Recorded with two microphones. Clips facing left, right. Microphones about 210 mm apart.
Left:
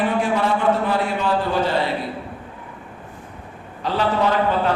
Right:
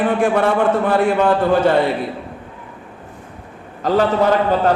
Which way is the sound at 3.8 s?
45° right (ahead or behind).